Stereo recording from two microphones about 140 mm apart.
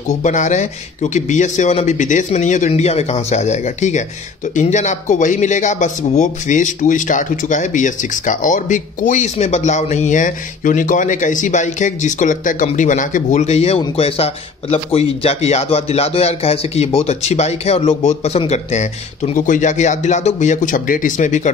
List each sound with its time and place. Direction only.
0.2 s speech: 60° left (ahead or behind)
2.7 s a man's voice: 50° left (ahead or behind)